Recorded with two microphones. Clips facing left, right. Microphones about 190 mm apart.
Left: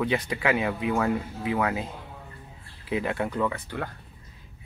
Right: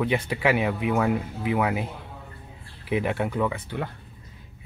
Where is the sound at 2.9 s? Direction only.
15° right (ahead or behind).